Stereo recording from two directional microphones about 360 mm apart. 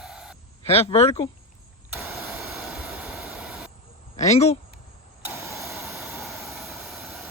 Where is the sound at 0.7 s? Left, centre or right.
Centre.